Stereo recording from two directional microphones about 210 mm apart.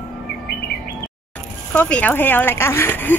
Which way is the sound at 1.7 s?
5° left (ahead or behind).